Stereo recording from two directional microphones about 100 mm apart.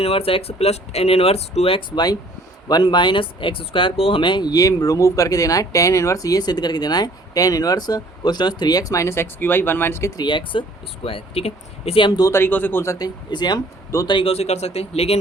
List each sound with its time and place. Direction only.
0.0 s speech: 75° left (ahead or behind)
2.6 s speech: 45° left (ahead or behind); by 10.1 s 25° left (ahead or behind)
10.2 s speech: 50° left (ahead or behind)
11.0 s speech: 70° left (ahead or behind)
12.0 s speech: 40° left (ahead or behind)
12.3 s a man's voice: 20° left (ahead or behind)
12.8 s speech: 30° left (ahead or behind)
13.3 s speech: 45° left (ahead or behind)
14.1 s speech: 65° left (ahead or behind); by 15.2 s 90° left